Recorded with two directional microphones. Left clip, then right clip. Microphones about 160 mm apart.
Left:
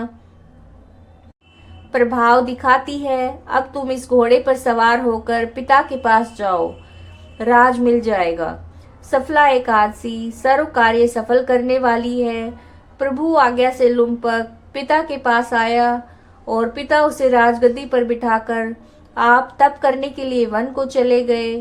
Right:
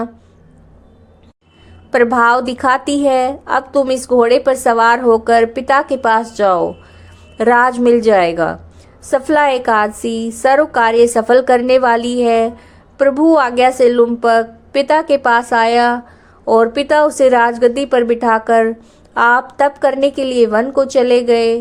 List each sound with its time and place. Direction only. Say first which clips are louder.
1.9 s a woman's voice: right 3 dB; 45° right (ahead or behind)